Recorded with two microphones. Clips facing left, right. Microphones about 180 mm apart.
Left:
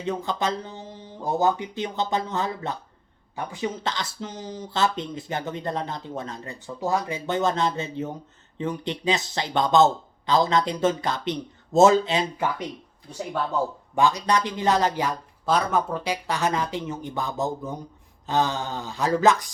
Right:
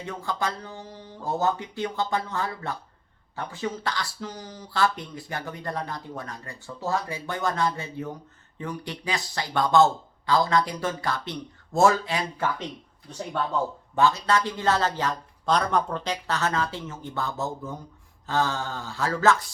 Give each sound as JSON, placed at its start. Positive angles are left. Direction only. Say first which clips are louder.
{"t": 0.0, "sound": "speech", "louder": "left 4 dB", "side_deg": 20}